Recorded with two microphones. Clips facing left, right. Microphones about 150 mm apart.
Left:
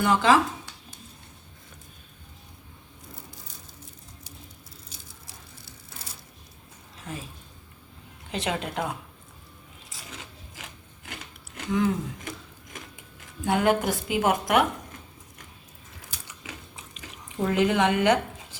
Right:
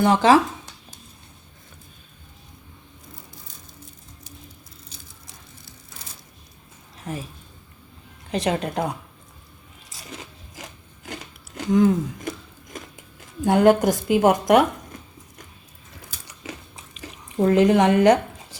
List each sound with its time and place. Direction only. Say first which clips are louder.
0.0 s a woman's voice: right 5 dB; 40° right (ahead or behind)
7.1 s a woman's voice: right 6 dB; 35° right (ahead or behind)
8.3 s a woman's voice: right 6 dB; 40° right (ahead or behind)
8.6 s a woman's voice: right 5 dB; 25° right (ahead or behind)
10.1 s filing: right 6 dB; 35° right (ahead or behind)
11.0 s a sound: right 6 dB; 40° right (ahead or behind)
13.4 s a woman's voice: right 7 dB; 40° right (ahead or behind)
16.2 s biting: right 7 dB; 35° right (ahead or behind)
17.0 s speech: right 8 dB; 35° right (ahead or behind)